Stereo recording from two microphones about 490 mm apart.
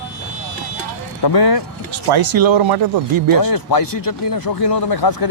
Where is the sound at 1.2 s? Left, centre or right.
Left.